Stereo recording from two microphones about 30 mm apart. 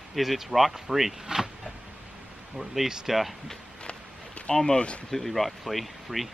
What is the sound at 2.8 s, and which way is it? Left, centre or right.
Speech, centre.